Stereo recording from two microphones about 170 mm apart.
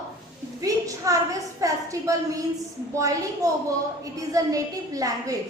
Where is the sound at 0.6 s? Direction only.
20° right (ahead or behind).